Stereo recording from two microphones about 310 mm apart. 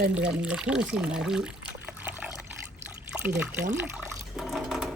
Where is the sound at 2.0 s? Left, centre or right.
Centre.